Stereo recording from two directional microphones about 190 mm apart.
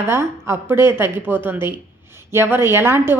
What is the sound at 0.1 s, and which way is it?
A woman's voice, 15° right (ahead or behind).